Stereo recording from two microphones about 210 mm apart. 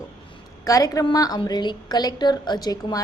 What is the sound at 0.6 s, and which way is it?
A woman's voice, 15° left (ahead or behind).